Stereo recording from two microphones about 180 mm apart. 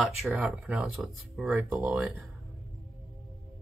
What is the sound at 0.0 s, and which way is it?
Speech, centre (ahead or behind).